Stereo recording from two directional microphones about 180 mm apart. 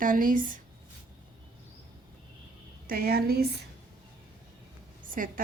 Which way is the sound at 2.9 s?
55° right (ahead or behind).